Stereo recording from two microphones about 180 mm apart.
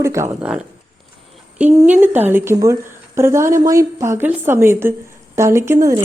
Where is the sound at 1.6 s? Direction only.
10° right (ahead or behind).